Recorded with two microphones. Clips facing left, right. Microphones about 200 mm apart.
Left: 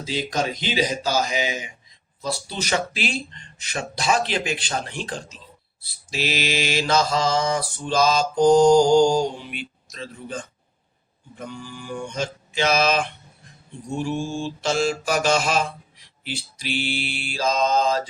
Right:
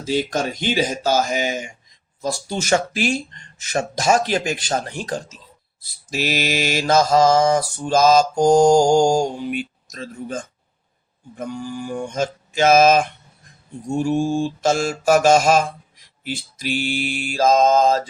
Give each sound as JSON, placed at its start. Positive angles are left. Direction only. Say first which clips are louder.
{"t": 0.0, "sound": "mantra", "louder": "right 4 dB", "side_deg": -50}